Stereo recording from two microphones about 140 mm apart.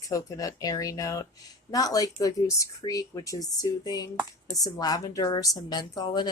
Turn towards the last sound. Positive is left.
turn(degrees=30)  # may be behind; listen again after turning